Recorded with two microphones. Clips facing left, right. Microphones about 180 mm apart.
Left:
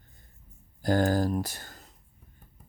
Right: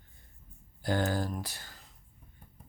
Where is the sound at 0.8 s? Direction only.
40° left (ahead or behind).